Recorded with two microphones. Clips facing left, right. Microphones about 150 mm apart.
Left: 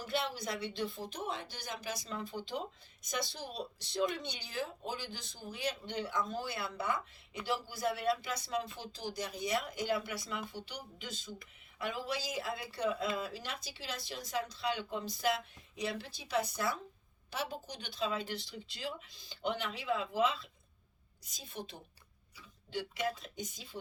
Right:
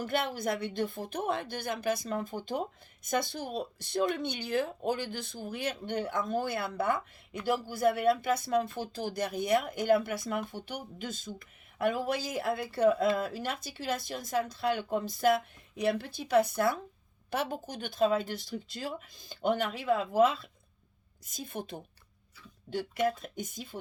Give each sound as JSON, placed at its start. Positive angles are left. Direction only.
{"t": 0.0, "sound": "speech", "side_deg": -55}